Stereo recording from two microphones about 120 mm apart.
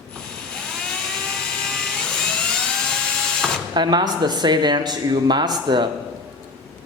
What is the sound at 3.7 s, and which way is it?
Speech, 35° right (ahead or behind).